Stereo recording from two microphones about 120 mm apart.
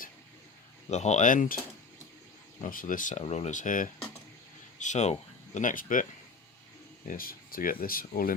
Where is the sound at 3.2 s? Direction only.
65° left (ahead or behind); by 6.0 s 90° left.